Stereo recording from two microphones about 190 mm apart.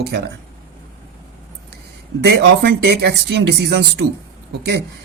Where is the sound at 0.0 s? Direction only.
55° right (ahead or behind).